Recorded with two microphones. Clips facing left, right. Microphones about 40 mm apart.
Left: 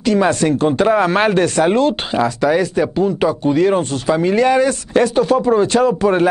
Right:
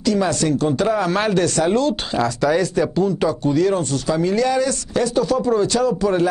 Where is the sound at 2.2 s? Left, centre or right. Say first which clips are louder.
Left 2 dB; centre.